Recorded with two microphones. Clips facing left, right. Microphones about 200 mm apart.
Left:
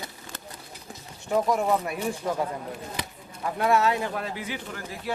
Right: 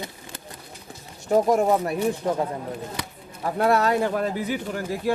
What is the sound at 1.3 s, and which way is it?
Speech, 45° right (ahead or behind).